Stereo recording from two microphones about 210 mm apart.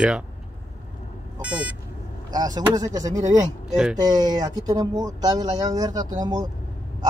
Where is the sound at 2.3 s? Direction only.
20° right (ahead or behind).